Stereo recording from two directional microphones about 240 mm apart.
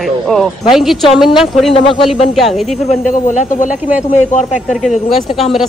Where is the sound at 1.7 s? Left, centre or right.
Left.